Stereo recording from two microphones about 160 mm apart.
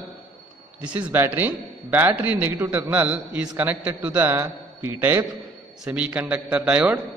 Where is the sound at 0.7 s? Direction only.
10° right (ahead or behind).